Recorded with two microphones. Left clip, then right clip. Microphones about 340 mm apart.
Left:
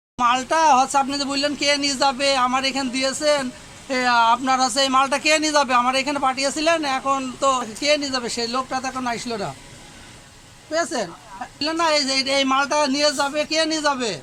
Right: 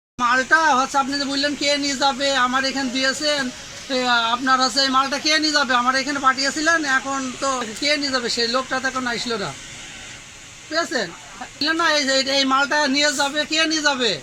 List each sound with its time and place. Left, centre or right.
0.2 s a man's voice: centre
2.6 s speech: centre
3.0 s a man's voice: centre
6.1 s a man's voice: centre
8.0 s speech: centre
10.7 s a man's voice: centre